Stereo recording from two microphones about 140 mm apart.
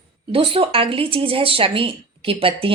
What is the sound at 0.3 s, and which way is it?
A woman's voice, 40° right (ahead or behind).